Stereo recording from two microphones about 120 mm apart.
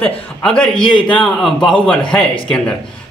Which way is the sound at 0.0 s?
5° left (ahead or behind).